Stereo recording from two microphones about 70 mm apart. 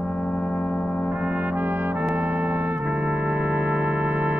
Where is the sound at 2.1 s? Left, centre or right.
Right.